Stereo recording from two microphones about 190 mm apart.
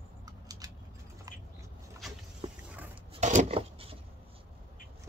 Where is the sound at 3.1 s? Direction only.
40° right (ahead or behind).